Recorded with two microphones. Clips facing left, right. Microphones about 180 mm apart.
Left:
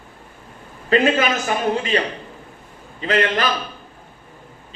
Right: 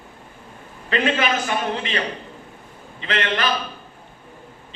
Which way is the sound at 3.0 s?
40° left (ahead or behind).